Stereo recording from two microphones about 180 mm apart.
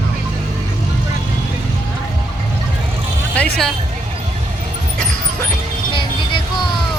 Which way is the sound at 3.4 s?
5° left (ahead or behind).